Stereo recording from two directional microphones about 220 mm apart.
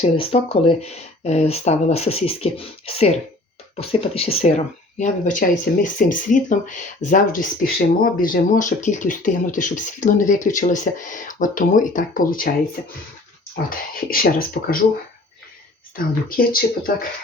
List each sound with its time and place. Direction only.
0.0 s speech: 25° left (ahead or behind)
16.0 s speech: 40° left (ahead or behind)